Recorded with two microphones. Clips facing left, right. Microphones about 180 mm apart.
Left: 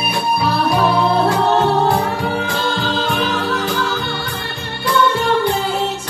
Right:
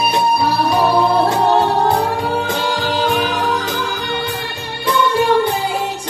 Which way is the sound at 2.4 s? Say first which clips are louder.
Right 1 dB; 15° right (ahead or behind).